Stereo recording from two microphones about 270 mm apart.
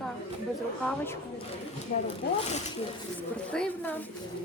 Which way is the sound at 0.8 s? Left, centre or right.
Centre.